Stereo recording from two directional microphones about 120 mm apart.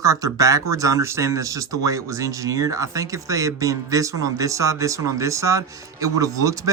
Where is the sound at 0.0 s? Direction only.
30° right (ahead or behind).